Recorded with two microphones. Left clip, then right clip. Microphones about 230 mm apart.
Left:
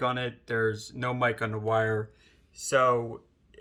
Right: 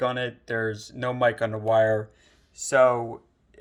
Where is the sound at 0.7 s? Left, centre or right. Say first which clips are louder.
Right 1 dB; left.